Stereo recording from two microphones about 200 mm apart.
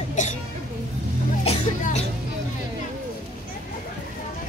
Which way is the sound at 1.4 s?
35° left (ahead or behind).